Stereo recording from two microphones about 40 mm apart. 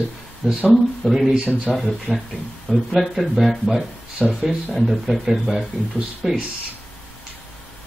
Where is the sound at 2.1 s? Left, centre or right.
Left.